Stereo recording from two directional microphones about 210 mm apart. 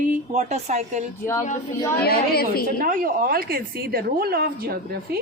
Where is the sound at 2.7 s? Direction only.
40° right (ahead or behind).